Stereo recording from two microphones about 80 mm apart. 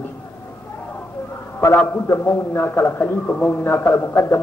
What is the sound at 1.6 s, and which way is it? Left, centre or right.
A man's voice, left.